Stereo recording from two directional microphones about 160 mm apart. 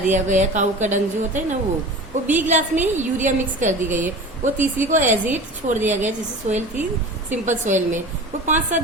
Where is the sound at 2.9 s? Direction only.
50° right (ahead or behind).